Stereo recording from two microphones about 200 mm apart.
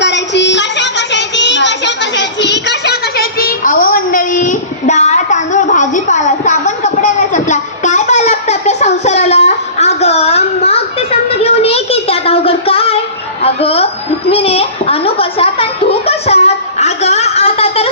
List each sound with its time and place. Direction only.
0.0 s child singing: 60° left (ahead or behind); by 13.0 s 30° left (ahead or behind)
13.4 s chuckle: 30° left (ahead or behind)
14.3 s a sound: 30° left (ahead or behind)